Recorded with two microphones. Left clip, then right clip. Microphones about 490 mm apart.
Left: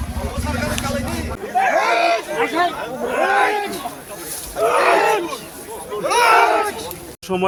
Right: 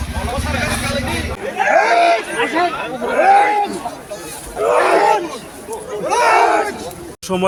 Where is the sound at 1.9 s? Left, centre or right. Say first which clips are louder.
Right 4 dB; left.